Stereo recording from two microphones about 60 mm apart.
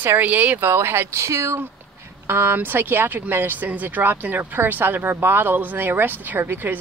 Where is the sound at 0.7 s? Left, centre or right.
Right.